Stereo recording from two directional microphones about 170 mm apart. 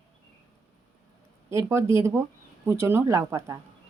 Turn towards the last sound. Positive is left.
turn(degrees=-15)  # may be behind; listen again after turning